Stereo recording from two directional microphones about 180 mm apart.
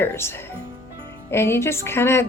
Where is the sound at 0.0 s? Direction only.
15° left (ahead or behind).